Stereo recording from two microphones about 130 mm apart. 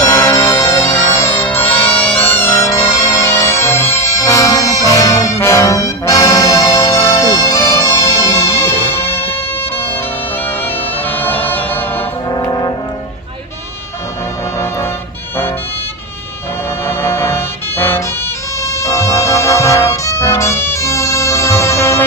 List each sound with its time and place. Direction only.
0.1 s music: 20° left (ahead or behind)
2.5 s music: 25° left (ahead or behind)
4.9 s brass instrument: 25° left (ahead or behind)
10.4 s music: 15° left (ahead or behind)
12.3 s music: 30° left (ahead or behind)
16.8 s music: 20° left (ahead or behind)